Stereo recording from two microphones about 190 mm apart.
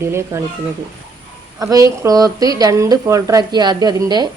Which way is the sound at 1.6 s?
20° right (ahead or behind).